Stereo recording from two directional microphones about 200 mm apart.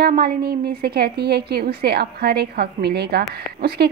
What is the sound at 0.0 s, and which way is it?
A woman's voice, 50° right (ahead or behind).